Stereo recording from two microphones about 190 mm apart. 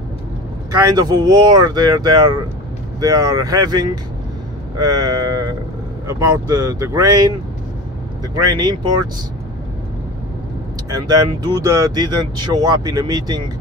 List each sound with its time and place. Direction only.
0.7 s speech: 20° right (ahead or behind)
8.4 s speech: 20° right (ahead or behind)
10.9 s speech: 20° right (ahead or behind)